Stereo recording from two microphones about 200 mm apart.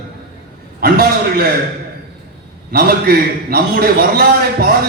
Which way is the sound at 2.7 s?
50° right (ahead or behind).